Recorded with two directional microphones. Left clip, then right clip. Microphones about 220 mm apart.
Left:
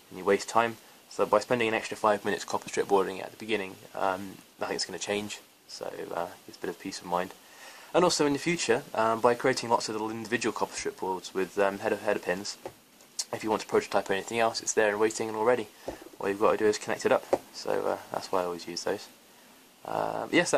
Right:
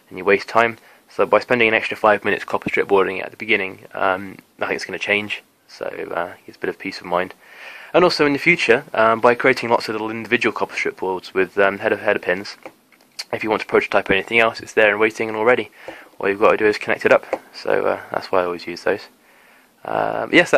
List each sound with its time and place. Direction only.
0.1 s speech: 35° right (ahead or behind)
19.8 s speech: 35° right (ahead or behind)